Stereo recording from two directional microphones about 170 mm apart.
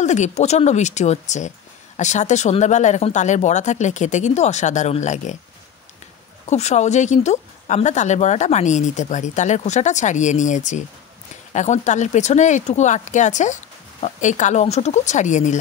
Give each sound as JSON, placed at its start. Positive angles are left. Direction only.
{"t": 0.0, "sound": "speech", "side_deg": 45}
{"t": 6.4, "sound": "speech", "side_deg": 40}